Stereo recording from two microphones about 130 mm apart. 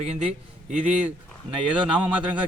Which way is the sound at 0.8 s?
10° right (ahead or behind).